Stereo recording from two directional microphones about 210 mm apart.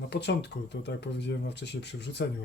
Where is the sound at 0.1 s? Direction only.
55° left (ahead or behind).